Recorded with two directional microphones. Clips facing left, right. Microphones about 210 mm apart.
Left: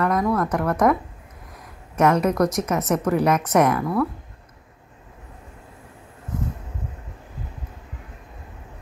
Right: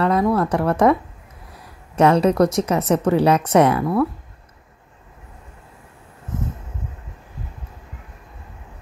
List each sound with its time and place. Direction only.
0.0 s speech: 30° right (ahead or behind)
2.0 s a woman's voice: 30° right (ahead or behind)